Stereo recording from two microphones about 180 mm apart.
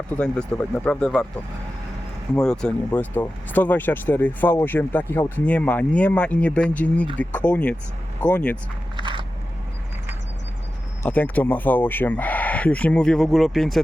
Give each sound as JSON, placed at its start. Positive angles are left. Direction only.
{"t": 0.2, "sound": "speech", "side_deg": 5}
{"t": 2.3, "sound": "speech", "side_deg": 5}
{"t": 9.0, "sound": "biting", "side_deg": -25}
{"t": 11.0, "sound": "speech", "side_deg": 10}